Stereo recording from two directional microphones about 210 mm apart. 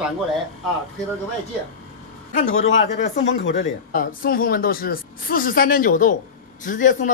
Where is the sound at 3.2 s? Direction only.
60° left (ahead or behind).